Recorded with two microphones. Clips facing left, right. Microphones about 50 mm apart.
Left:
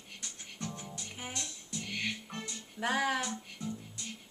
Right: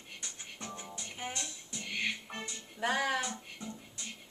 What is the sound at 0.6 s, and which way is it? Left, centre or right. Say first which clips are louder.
Music: left 2 dB; centre.